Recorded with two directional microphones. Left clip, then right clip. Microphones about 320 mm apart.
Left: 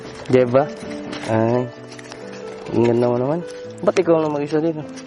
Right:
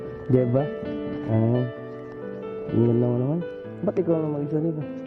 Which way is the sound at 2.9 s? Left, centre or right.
Centre.